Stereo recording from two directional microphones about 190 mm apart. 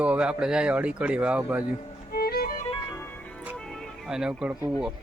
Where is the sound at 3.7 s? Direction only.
Centre (ahead or behind).